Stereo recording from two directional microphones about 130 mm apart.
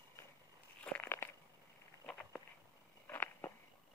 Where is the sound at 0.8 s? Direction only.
10° left (ahead or behind).